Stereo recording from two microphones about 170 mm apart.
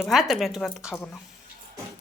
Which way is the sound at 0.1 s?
Centre (ahead or behind).